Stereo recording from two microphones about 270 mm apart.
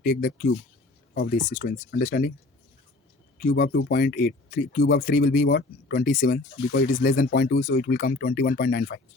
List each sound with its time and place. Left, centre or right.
0.0 s speech: left
3.3 s speech: left